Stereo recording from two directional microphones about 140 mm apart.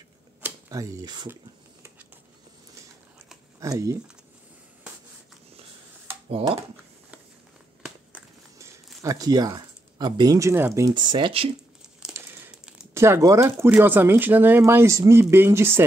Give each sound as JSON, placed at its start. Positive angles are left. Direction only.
{"t": 0.4, "sound": "a sound", "side_deg": -25}
{"t": 1.3, "sound": "a sound", "side_deg": -15}
{"t": 3.5, "sound": "speech", "side_deg": -25}
{"t": 9.0, "sound": "speech", "side_deg": -25}
{"t": 12.1, "sound": "crumpling", "side_deg": -15}
{"t": 12.9, "sound": "speech", "side_deg": -20}